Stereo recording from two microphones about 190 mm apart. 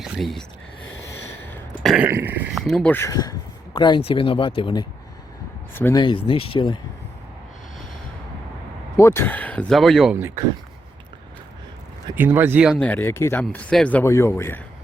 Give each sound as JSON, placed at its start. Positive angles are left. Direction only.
{"t": 0.0, "sound": "speech", "side_deg": 0}
{"t": 1.8, "sound": "a sound", "side_deg": 0}
{"t": 2.0, "sound": "speech", "side_deg": -10}
{"t": 2.6, "sound": "speech", "side_deg": 5}
{"t": 5.7, "sound": "speech", "side_deg": 10}
{"t": 6.0, "sound": "speech", "side_deg": 25}
{"t": 9.0, "sound": "speech", "side_deg": 15}
{"t": 10.2, "sound": "speech", "side_deg": -10}
{"t": 12.1, "sound": "speech", "side_deg": -10}
{"t": 12.7, "sound": "speech", "side_deg": 5}